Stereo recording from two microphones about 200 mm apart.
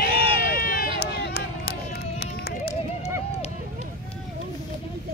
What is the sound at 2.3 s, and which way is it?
Music, 55° left (ahead or behind).